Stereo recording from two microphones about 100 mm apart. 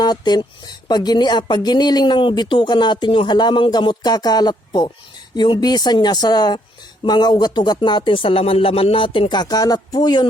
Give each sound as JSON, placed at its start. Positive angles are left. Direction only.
{"t": 0.0, "sound": "speech", "side_deg": 45}